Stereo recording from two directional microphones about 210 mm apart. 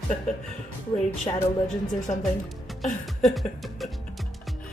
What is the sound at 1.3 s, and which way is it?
Speech, 25° left (ahead or behind).